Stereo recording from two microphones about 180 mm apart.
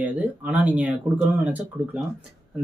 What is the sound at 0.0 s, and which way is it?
Speech, 10° right (ahead or behind).